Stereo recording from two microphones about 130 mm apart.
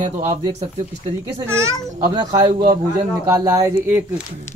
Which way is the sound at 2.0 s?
30° right (ahead or behind).